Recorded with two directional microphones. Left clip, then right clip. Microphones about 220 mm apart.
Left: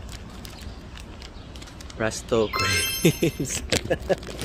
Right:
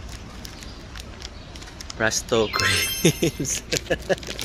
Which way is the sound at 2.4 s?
5° left (ahead or behind).